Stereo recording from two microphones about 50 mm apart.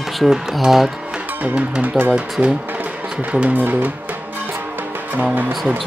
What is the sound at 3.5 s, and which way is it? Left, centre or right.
Speech, right.